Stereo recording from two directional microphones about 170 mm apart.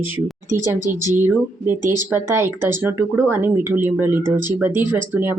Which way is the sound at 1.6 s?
15° right (ahead or behind).